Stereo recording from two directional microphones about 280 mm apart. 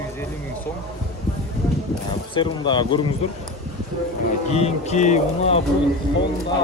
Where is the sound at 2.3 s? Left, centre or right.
Centre.